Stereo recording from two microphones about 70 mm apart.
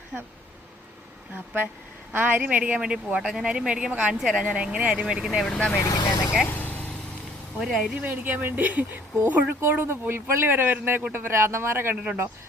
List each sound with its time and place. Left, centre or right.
0.1 s speech: centre
2.1 s speech: right; by 5.5 s centre
5.5 s speech: centre
5.8 s speech: left
6.5 s vehicle: left
7.6 s speech: centre
8.0 s speech: right
12.0 s speech: right